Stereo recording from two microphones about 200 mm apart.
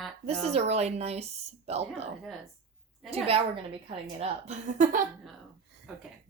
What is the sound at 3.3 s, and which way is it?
A woman's voice, 30° right (ahead or behind).